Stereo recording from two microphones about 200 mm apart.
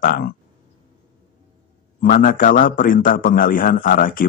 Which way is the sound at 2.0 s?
45° left (ahead or behind).